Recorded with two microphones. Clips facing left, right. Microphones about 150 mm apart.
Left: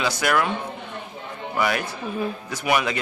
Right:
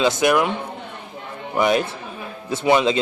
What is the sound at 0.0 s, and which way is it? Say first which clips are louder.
Speech: right 5 dB; 20° right (ahead or behind).